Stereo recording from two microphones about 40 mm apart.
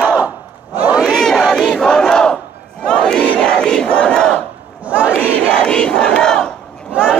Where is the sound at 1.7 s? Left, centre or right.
Centre.